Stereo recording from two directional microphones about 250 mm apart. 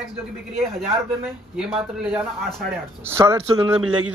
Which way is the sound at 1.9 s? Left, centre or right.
Centre.